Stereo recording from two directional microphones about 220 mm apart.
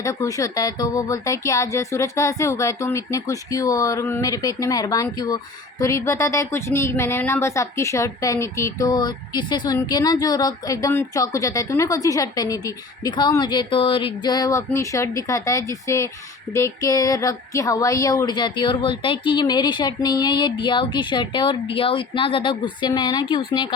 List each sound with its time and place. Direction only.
0.0 s speech: 15° left (ahead or behind)